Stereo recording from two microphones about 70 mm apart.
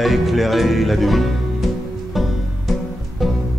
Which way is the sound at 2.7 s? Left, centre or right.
Centre.